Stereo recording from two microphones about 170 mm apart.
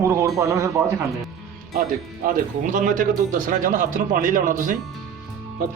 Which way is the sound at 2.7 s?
50° right (ahead or behind).